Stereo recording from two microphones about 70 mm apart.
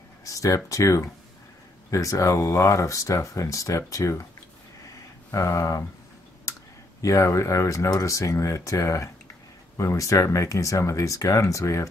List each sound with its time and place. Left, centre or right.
0.2 s speech: left
4.8 s a sound: left
7.0 s speech: left